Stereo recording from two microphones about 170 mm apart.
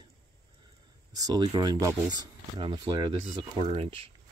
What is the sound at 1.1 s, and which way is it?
Speech, 25° right (ahead or behind).